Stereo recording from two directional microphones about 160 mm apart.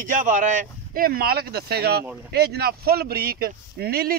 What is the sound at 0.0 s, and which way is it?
Speech, 55° right (ahead or behind).